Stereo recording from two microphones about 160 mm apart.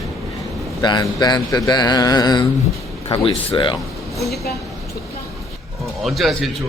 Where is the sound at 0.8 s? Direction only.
25° left (ahead or behind).